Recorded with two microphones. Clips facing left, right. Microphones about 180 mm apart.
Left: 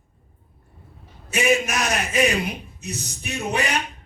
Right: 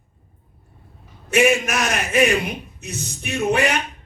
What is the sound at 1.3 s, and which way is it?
Speech, 60° right (ahead or behind).